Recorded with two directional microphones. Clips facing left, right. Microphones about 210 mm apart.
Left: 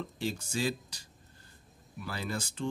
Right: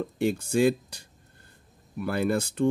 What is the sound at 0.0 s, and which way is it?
Speech, 55° right (ahead or behind).